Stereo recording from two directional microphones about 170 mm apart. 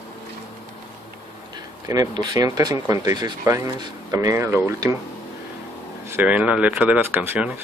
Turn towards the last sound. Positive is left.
turn(degrees=-10)  # may be behind; listen again after turning